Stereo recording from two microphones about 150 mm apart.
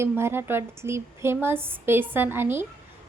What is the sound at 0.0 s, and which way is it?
A woman's voice, 15° right (ahead or behind).